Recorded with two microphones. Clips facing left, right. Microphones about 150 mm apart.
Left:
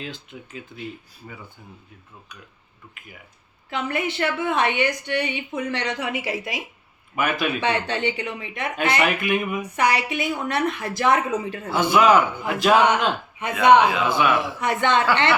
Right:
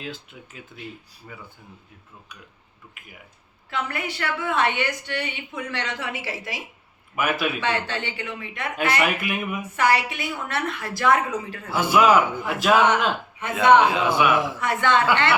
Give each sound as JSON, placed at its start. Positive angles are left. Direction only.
{"t": 0.0, "sound": "a man's voice", "side_deg": -5}
{"t": 3.7, "sound": "a woman's voice", "side_deg": 20}
{"t": 7.2, "sound": "a man's voice", "side_deg": -5}
{"t": 7.6, "sound": "a woman's voice", "side_deg": 20}
{"t": 9.0, "sound": "a man's voice", "side_deg": -5}
{"t": 9.7, "sound": "a woman's voice", "side_deg": 20}
{"t": 11.7, "sound": "a man's voice", "side_deg": -5}
{"t": 13.4, "sound": "a man's voice", "side_deg": 15}
{"t": 14.1, "sound": "a man's voice", "side_deg": -10}
{"t": 14.6, "sound": "a woman's voice", "side_deg": 20}